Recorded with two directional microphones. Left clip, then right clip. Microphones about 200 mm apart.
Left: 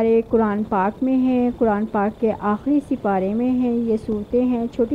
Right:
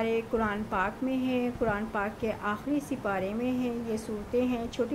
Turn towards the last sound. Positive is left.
turn(degrees=30)  # may be behind; listen again after turning